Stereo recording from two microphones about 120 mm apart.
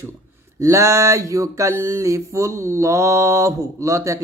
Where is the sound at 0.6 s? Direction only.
25° right (ahead or behind).